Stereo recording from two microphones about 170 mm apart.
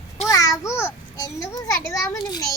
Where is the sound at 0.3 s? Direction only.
20° left (ahead or behind).